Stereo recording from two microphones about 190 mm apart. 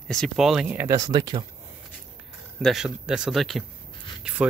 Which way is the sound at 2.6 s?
Centre (ahead or behind).